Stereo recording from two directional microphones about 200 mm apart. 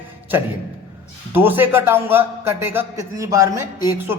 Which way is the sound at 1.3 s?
10° right (ahead or behind).